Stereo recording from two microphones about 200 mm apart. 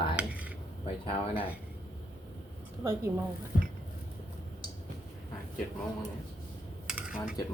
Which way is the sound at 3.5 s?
40° left (ahead or behind).